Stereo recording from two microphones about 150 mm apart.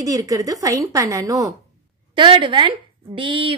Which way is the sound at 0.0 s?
25° right (ahead or behind).